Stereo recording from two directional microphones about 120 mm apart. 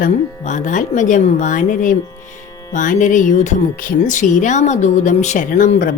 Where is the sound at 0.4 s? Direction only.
90° left.